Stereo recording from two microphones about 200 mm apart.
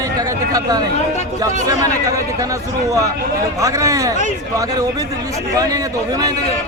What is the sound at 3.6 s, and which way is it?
Speech, 15° right (ahead or behind).